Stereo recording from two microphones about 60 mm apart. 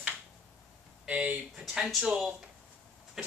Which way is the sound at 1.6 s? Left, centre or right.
Centre.